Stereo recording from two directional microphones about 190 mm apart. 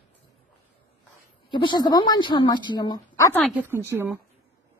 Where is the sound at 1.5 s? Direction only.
25° left (ahead or behind).